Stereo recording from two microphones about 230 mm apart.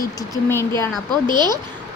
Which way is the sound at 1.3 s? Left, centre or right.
Centre.